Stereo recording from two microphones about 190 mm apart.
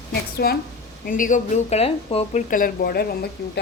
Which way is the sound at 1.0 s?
45° left (ahead or behind).